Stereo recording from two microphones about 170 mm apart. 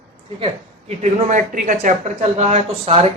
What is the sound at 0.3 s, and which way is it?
Speech, 35° right (ahead or behind).